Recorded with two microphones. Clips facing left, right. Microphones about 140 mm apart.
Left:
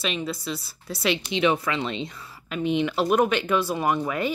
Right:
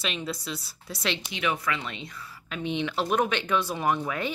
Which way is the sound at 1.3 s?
25° left (ahead or behind).